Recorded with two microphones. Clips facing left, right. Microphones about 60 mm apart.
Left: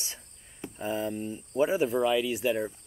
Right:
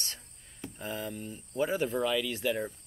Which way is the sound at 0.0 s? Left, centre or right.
Centre.